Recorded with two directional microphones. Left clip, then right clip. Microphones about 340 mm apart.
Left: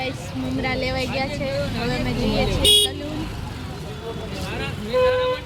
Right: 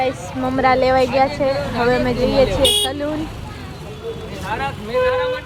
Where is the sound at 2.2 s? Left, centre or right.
Centre.